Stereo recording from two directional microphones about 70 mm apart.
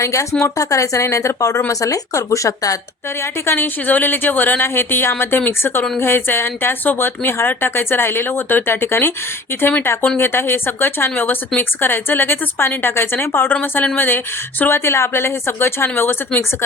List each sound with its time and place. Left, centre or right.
0.0 s speech: left
3.4 s speech: left
10.2 s speech: left
13.5 s speech: left
14.6 s speech: left